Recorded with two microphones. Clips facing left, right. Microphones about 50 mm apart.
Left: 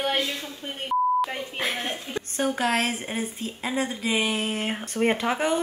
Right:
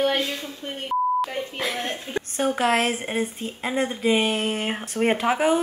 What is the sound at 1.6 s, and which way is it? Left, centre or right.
Speech, left.